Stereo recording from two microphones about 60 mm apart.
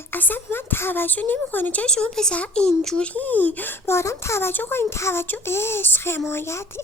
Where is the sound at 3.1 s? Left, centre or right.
Left.